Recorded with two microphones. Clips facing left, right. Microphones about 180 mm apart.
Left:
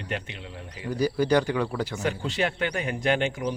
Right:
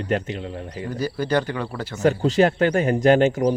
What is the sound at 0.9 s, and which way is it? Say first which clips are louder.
Speech: left 1 dB; 15° left (ahead or behind).